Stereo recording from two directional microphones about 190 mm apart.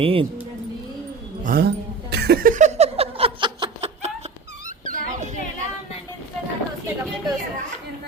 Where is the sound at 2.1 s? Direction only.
55° right (ahead or behind); by 4.1 s 30° right (ahead or behind).